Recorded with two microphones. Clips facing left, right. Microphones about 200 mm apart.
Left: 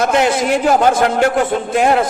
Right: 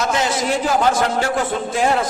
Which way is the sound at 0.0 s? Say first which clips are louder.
Left 6 dB; 60° left (ahead or behind).